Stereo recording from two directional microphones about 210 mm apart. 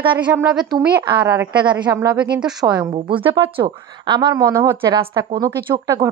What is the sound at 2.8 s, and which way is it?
A woman's voice, 20° right (ahead or behind).